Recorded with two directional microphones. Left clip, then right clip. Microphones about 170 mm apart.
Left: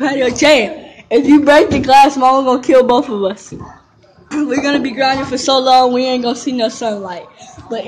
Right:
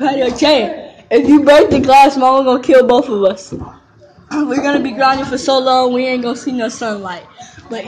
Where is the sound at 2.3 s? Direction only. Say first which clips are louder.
Right 1 dB; 20° left (ahead or behind).